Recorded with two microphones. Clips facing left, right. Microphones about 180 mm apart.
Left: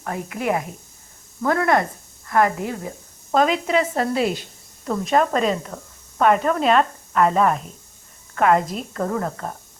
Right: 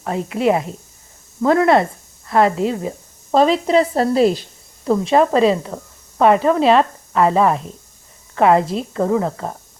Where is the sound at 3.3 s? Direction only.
30° right (ahead or behind).